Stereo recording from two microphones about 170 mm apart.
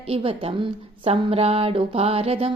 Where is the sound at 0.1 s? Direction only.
30° right (ahead or behind).